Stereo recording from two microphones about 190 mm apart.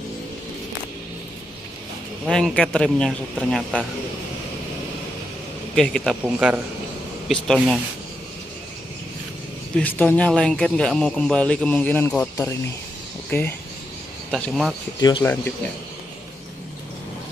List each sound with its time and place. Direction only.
2.2 s a man's voice: centre (ahead or behind)
5.8 s a man's voice: 5° left (ahead or behind)
6.2 s a man's voice: 10° right (ahead or behind)
9.8 s a man's voice: 10° left (ahead or behind)
15.0 s speech: 20° left (ahead or behind)